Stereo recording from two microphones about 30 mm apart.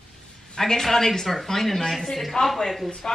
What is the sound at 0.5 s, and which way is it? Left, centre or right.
A woman's voice, centre.